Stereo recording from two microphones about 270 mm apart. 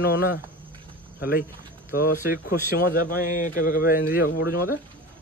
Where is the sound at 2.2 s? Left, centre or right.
Left.